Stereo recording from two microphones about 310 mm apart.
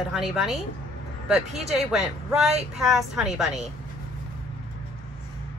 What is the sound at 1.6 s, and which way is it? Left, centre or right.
Speech, centre.